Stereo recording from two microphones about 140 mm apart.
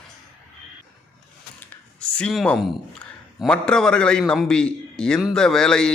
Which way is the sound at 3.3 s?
5° left (ahead or behind).